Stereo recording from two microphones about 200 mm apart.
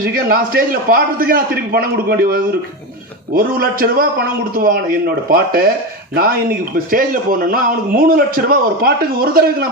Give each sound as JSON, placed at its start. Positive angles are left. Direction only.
{"t": 0.0, "sound": "a man's voice", "side_deg": -45}
{"t": 6.7, "sound": "a man's voice", "side_deg": -45}